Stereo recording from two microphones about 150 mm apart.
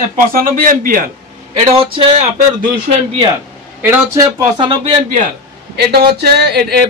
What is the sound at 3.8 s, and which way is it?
Speech, 15° right (ahead or behind).